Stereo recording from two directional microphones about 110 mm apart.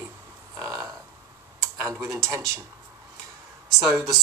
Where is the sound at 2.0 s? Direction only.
25° right (ahead or behind).